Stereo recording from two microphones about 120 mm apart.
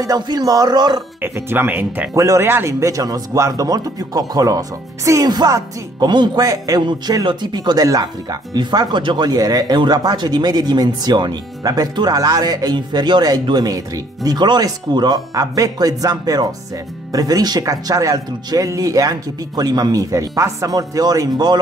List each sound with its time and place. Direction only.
0.0 s speech: 30° right (ahead or behind)
1.2 s speech: 20° right (ahead or behind); by 21.5 s 35° right (ahead or behind)